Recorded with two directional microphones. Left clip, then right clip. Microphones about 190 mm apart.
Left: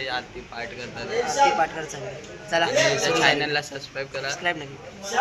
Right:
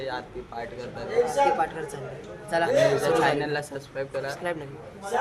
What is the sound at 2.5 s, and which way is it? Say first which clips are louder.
Speech: left 3 dB; 5° left (ahead or behind).